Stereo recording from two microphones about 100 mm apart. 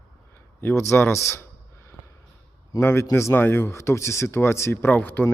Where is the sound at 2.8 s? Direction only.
25° left (ahead or behind).